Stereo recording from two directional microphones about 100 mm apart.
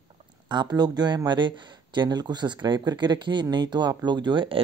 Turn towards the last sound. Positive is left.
turn(degrees=-55)  # may be behind; listen again after turning